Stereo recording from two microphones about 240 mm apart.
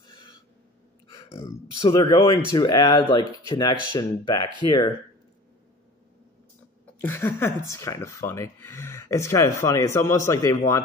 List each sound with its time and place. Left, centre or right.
0.0 s a sound: left
1.0 s speech: centre
7.0 s speech: centre